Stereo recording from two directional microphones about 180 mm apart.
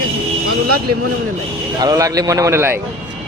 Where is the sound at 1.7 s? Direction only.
20° right (ahead or behind).